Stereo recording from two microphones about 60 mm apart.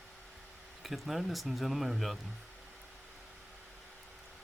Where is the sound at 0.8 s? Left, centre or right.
Centre.